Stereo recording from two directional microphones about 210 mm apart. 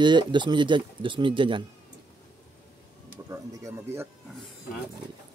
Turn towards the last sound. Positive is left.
turn(degrees=-15)  # may be behind; listen again after turning